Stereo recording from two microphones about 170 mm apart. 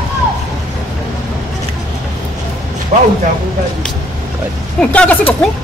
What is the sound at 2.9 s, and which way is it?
Speech, 45° right (ahead or behind).